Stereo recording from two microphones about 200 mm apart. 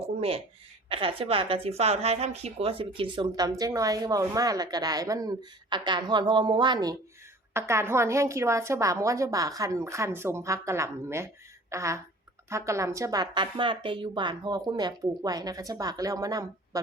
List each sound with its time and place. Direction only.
0.2 s a woman's voice: 30° right (ahead or behind)